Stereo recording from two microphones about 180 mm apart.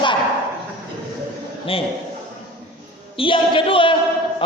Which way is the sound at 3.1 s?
30° left (ahead or behind).